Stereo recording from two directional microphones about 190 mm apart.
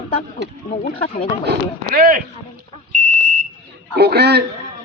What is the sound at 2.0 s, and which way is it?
Speech, 50° right (ahead or behind).